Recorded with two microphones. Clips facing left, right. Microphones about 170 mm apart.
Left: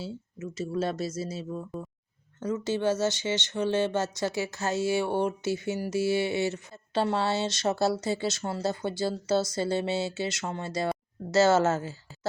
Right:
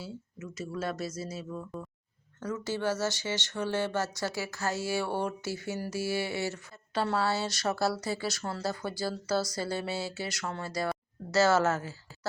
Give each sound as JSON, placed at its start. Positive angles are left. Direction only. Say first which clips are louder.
{"t": 0.0, "sound": "speech", "louder": "left 5 dB", "side_deg": 25}